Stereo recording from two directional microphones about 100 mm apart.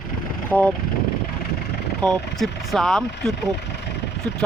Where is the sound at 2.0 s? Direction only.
5° left (ahead or behind).